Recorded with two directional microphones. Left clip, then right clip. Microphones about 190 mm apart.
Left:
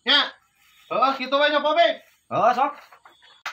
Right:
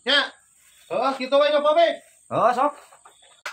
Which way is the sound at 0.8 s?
30° right (ahead or behind).